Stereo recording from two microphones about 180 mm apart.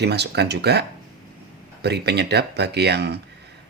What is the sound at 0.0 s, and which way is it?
Speech, 65° right (ahead or behind).